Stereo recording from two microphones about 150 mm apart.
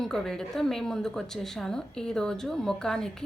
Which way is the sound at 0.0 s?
5° left (ahead or behind).